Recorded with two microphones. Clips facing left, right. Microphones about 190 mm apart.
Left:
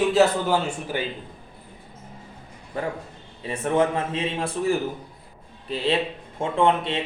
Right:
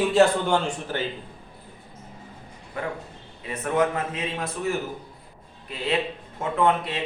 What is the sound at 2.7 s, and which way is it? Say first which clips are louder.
A man's voice: left 2 dB; 30° left (ahead or behind).